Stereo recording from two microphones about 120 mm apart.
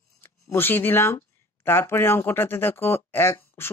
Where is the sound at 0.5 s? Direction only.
15° left (ahead or behind).